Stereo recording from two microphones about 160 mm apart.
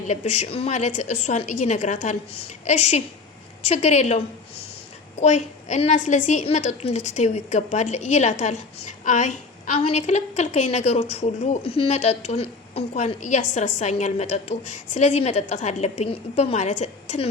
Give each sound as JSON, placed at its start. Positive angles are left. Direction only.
{"t": 0.1, "sound": "a woman's voice", "side_deg": 45}
{"t": 5.2, "sound": "a woman's voice", "side_deg": 45}